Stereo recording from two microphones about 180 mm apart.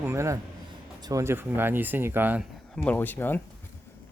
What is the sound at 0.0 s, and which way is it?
A man's voice, 15° right (ahead or behind).